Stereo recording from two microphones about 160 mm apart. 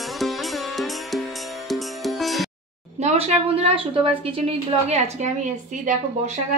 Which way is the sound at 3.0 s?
45° right (ahead or behind).